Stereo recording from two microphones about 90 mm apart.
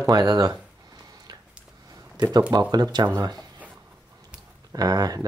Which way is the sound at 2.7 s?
50° right (ahead or behind).